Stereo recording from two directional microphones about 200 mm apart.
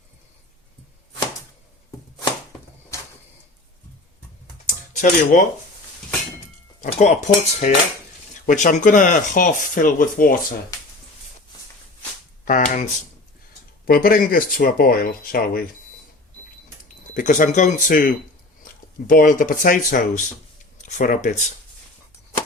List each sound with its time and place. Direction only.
2.9 s a sound: 15° left (ahead or behind)
4.9 s speech: 40° left (ahead or behind)
6.8 s speech: 40° left (ahead or behind)
12.5 s speech: 40° left (ahead or behind)
17.2 s speech: 40° left (ahead or behind)